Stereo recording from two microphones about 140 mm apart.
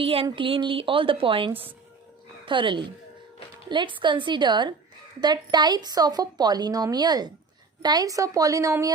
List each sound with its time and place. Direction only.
0.0 s a woman's voice: 40° right (ahead or behind); by 8.9 s 25° right (ahead or behind)